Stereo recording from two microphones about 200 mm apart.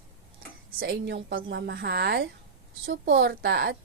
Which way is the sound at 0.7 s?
55° right (ahead or behind).